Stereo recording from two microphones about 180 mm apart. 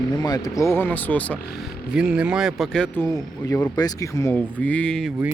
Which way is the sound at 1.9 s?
5° right (ahead or behind).